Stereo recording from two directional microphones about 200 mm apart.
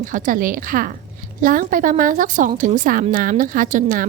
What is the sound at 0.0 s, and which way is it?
A woman's voice, 40° right (ahead or behind).